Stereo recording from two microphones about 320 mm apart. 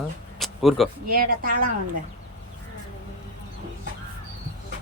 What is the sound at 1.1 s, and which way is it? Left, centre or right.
Speech, right.